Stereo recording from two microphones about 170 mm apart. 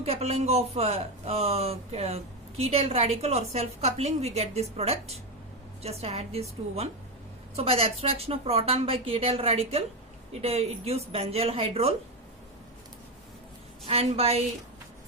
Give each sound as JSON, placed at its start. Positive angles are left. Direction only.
{"t": 0.0, "sound": "a woman's voice", "side_deg": -40}
{"t": 7.5, "sound": "a woman's voice", "side_deg": -35}
{"t": 13.8, "sound": "a woman's voice", "side_deg": -35}